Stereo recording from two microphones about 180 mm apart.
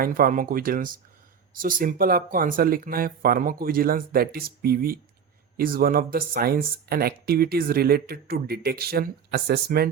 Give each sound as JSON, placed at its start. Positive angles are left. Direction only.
{"t": 0.0, "sound": "speech", "side_deg": -50}